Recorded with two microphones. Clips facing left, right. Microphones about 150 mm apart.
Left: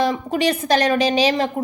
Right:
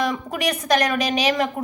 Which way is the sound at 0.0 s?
30° left (ahead or behind).